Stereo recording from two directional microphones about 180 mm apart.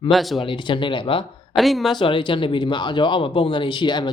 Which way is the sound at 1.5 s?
Centre (ahead or behind).